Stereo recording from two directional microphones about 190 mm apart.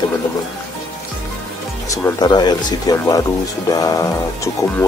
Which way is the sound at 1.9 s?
15° left (ahead or behind).